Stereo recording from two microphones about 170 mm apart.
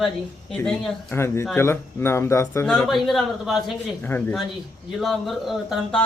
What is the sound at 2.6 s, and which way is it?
Speech, 5° left (ahead or behind).